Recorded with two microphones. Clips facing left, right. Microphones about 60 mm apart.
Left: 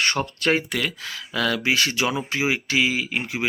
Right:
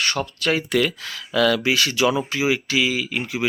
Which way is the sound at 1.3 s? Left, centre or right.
Centre.